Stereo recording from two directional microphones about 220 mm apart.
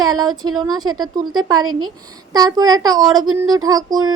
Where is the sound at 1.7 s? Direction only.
70° right (ahead or behind).